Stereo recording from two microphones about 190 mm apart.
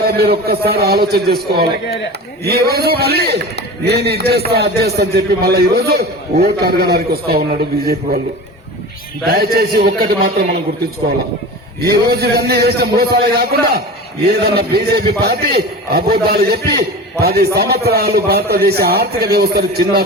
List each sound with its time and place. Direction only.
0.0 s a man's voice: 55° right (ahead or behind)
9.3 s a man's voice: 55° right (ahead or behind)
11.8 s a man's voice: 55° right (ahead or behind)